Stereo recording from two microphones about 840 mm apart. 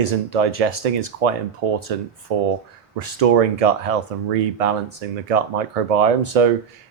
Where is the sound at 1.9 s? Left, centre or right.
Right.